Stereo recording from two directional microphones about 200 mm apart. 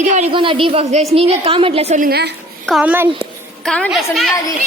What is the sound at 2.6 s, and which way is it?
Speech, 5° right (ahead or behind).